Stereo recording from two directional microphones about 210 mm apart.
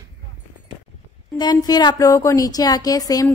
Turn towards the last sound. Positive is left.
turn(degrees=15)  # may be behind; listen again after turning